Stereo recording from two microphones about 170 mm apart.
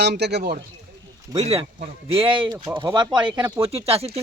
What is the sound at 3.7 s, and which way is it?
Speech, 35° right (ahead or behind).